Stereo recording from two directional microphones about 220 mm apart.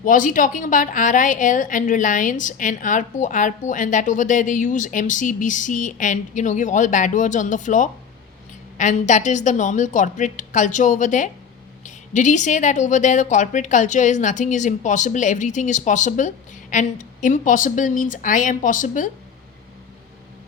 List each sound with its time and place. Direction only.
0.0 s a woman's voice: 40° left (ahead or behind)